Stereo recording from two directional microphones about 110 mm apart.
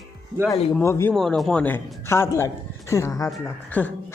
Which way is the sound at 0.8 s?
25° left (ahead or behind).